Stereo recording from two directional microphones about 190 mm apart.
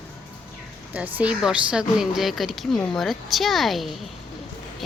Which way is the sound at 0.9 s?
5° right (ahead or behind).